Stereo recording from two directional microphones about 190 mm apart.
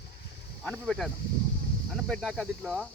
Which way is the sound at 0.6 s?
5° left (ahead or behind).